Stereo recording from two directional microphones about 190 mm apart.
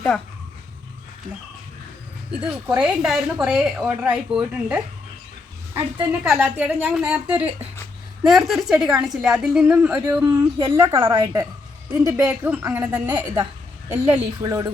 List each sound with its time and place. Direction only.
2.4 s a woman's voice: 5° right (ahead or behind)
6.0 s a woman's voice: centre (ahead or behind)
6.6 s a woman's voice: 10° right (ahead or behind)
10.2 s a woman's voice: 30° right (ahead or behind)